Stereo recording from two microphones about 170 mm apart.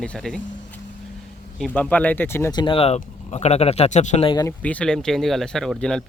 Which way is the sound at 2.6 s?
30° left (ahead or behind).